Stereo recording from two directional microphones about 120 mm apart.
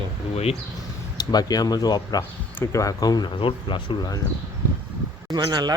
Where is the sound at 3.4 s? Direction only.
45° left (ahead or behind).